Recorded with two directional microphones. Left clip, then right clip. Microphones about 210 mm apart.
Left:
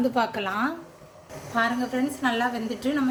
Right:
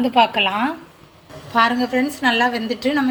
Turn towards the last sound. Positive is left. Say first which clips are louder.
# right 7 dB
turn(degrees=-15)  # may be behind; listen again after turning